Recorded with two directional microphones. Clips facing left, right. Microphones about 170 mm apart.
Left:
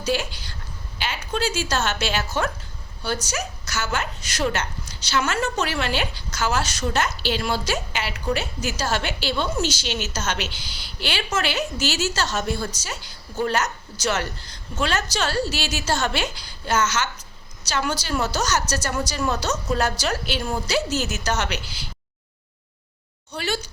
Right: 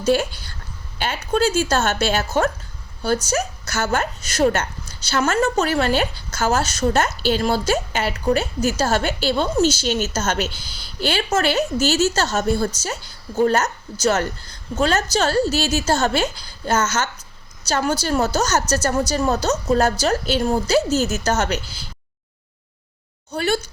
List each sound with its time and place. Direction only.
0.0 s a woman's voice: 50° right (ahead or behind)
23.3 s a woman's voice: 50° right (ahead or behind)